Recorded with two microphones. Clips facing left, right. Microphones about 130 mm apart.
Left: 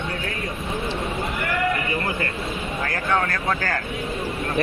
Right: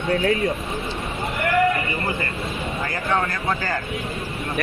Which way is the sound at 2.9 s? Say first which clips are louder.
Left 1 dB; centre (ahead or behind).